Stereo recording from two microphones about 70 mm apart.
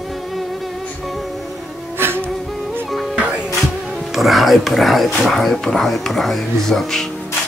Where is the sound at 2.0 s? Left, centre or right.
Right.